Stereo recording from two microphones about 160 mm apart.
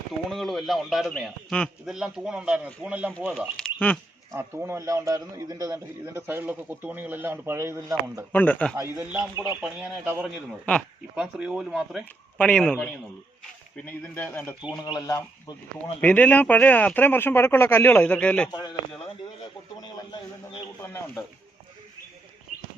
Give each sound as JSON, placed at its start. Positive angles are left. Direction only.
{"t": 0.3, "sound": "a man's voice", "side_deg": 0}
{"t": 3.6, "sound": "a sound", "side_deg": 5}
{"t": 4.3, "sound": "a man's voice", "side_deg": -15}
{"t": 8.3, "sound": "speech", "side_deg": 10}
{"t": 8.7, "sound": "a man's voice", "side_deg": -15}
{"t": 9.6, "sound": "a man's voice", "side_deg": -5}
{"t": 14.8, "sound": "speech", "side_deg": 25}
{"t": 16.0, "sound": "speech", "side_deg": 10}
{"t": 18.5, "sound": "speech", "side_deg": 25}
{"t": 19.8, "sound": "a man's voice", "side_deg": 25}